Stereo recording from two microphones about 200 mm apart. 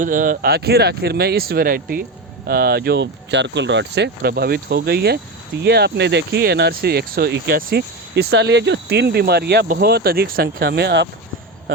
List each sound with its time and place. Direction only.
0.0 s speech: 40° right (ahead or behind); by 11.1 s 60° right (ahead or behind)